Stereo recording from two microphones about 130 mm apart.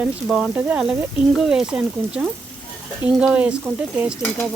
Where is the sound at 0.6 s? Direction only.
10° right (ahead or behind).